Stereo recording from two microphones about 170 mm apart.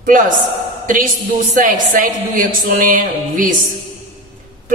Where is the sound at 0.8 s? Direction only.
50° right (ahead or behind).